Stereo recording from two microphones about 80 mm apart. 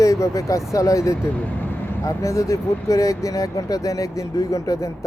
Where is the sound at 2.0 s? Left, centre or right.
Left.